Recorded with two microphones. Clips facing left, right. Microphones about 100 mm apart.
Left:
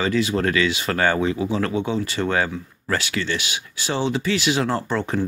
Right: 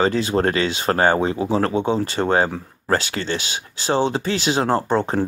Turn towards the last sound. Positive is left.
turn(degrees=-35)  # may be behind; listen again after turning